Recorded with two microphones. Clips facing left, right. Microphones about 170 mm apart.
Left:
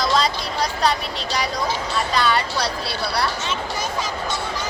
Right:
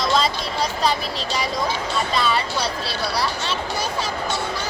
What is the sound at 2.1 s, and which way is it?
Speech, centre (ahead or behind).